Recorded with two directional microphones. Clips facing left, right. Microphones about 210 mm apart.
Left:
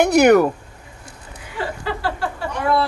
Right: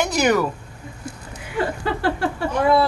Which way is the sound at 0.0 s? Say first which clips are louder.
Left 7 dB; 60° left (ahead or behind).